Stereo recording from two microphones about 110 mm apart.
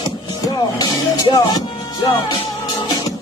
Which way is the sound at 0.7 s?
35° left (ahead or behind).